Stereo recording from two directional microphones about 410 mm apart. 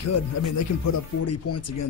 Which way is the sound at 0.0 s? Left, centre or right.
Left.